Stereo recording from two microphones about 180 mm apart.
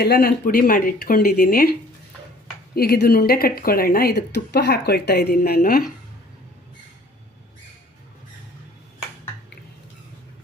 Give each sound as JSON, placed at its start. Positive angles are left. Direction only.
{"t": 0.0, "sound": "speech", "side_deg": 60}
{"t": 2.7, "sound": "speech", "side_deg": 55}